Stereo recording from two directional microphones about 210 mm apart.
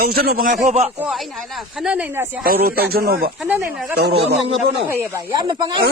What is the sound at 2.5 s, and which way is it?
Speech, 45° right (ahead or behind).